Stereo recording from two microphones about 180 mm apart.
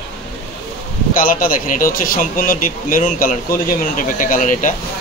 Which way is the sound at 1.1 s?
50° left (ahead or behind).